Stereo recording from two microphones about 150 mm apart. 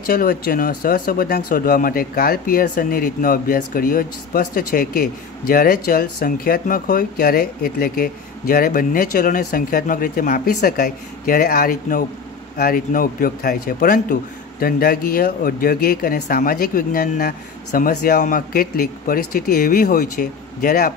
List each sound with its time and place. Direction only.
0.0 s speech: 75° left (ahead or behind)